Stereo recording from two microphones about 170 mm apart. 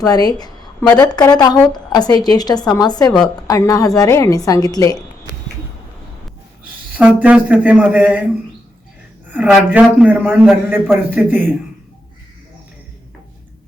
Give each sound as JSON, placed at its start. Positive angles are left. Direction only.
{"t": 0.0, "sound": "a sound", "side_deg": 20}
{"t": 1.1, "sound": "a woman's voice", "side_deg": 20}
{"t": 6.9, "sound": "a man's voice", "side_deg": -10}
{"t": 9.3, "sound": "a man's voice", "side_deg": -10}